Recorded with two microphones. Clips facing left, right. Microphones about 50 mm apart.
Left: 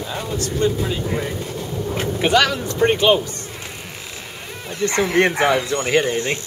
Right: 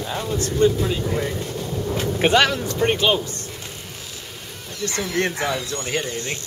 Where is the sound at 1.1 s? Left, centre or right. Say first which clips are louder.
Even; centre.